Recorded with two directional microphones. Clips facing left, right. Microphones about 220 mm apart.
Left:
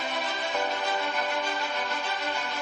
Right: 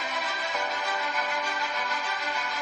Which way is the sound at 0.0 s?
30° left (ahead or behind).